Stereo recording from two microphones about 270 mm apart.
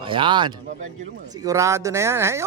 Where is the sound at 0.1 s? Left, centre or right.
Centre.